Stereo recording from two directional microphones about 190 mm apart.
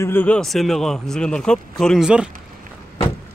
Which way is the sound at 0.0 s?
10° left (ahead or behind).